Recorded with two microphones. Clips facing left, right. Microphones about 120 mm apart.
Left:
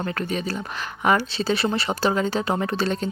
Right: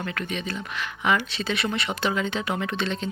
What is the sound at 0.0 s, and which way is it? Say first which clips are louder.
Speech: left 4 dB; 35° left (ahead or behind).